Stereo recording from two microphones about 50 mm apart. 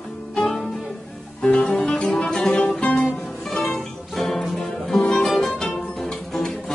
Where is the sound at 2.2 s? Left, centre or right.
Centre.